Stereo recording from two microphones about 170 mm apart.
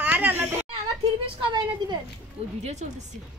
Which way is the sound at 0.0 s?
10° right (ahead or behind).